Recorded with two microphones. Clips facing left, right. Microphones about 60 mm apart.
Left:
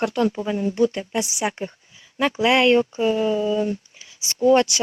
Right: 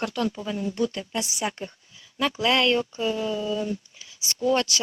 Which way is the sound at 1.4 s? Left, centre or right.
Left.